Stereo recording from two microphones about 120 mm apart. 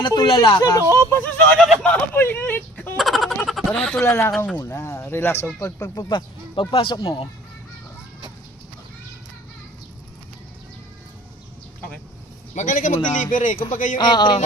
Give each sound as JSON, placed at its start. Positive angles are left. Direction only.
{"t": 0.0, "sound": "speech", "side_deg": 40}
{"t": 1.1, "sound": "speech", "side_deg": 15}
{"t": 1.8, "sound": "a sound", "side_deg": 10}
{"t": 3.0, "sound": "a sound", "side_deg": 0}
{"t": 4.0, "sound": "speech", "side_deg": 20}
{"t": 5.6, "sound": "speech", "side_deg": 30}
{"t": 12.5, "sound": "speech", "side_deg": 90}
{"t": 13.9, "sound": "speech", "side_deg": 35}